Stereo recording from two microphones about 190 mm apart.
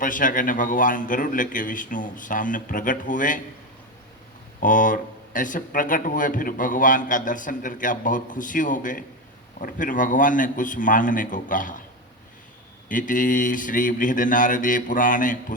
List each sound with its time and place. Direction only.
0.0 s speech: 45° left (ahead or behind)
4.6 s speech: 45° left (ahead or behind)
12.9 s speech: 45° left (ahead or behind)